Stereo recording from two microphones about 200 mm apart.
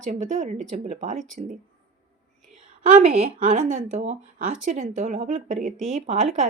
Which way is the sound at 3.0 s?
30° right (ahead or behind).